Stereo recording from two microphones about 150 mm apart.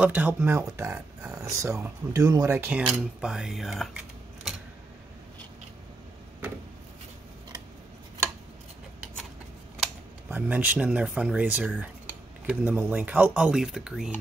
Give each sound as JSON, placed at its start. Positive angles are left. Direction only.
{"t": 0.0, "sound": "speech", "side_deg": -10}
{"t": 10.3, "sound": "speech", "side_deg": -10}